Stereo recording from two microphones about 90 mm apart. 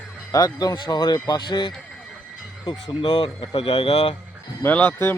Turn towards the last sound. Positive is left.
turn(degrees=25)  # may be behind; listen again after turning